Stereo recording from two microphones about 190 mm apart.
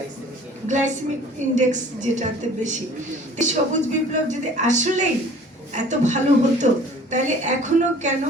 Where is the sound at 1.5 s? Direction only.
40° right (ahead or behind).